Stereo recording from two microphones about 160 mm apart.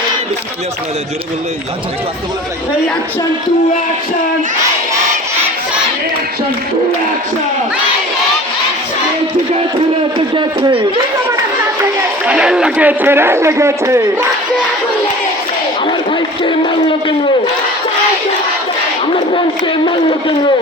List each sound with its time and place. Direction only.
10.2 s a man's voice: 30° right (ahead or behind)
12.2 s a man's voice: 5° right (ahead or behind)
19.1 s speech: 30° left (ahead or behind)